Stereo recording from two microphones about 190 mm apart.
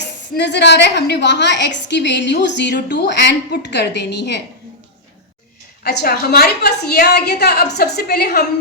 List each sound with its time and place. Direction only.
0.3 s a woman's voice: 65° left (ahead or behind)
5.8 s a woman's voice: 60° left (ahead or behind)